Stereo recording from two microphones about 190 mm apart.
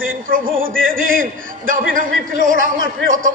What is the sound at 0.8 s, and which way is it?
A man's voice, 45° right (ahead or behind).